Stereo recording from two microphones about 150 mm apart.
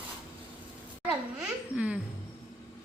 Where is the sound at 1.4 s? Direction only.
10° right (ahead or behind).